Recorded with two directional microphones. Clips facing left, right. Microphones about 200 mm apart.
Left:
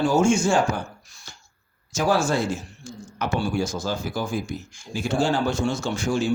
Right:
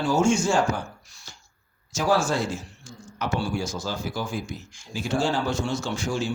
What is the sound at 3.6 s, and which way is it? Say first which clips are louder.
Speech: left 3 dB; 50° left (ahead or behind).